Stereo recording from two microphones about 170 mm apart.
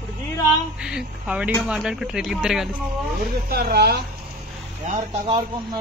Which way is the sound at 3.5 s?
65° right (ahead or behind).